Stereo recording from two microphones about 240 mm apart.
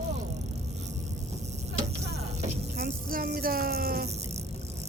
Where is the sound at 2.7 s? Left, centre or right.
Right.